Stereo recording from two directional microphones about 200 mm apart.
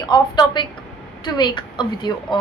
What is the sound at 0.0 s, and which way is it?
A woman's voice, 20° left (ahead or behind).